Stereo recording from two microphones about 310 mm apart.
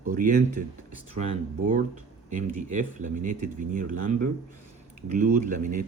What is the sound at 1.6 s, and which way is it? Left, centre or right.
Speech, right.